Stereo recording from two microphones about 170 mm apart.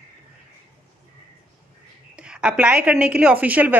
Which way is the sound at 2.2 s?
5° right (ahead or behind).